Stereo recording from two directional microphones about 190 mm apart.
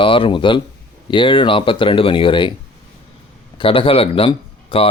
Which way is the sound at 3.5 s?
30° left (ahead or behind).